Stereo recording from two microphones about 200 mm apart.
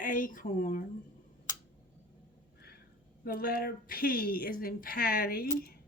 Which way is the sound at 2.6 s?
50° left (ahead or behind).